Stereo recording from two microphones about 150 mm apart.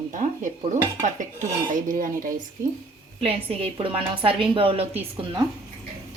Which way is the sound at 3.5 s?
40° right (ahead or behind).